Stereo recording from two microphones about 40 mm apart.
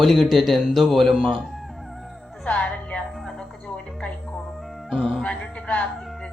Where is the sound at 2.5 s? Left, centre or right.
Left.